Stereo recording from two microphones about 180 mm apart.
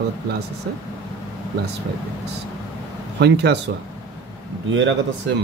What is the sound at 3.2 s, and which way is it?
Speech, 70° right (ahead or behind).